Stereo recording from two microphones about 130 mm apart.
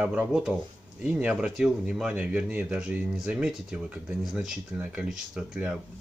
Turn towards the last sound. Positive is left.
turn(degrees=-5)  # may be behind; listen again after turning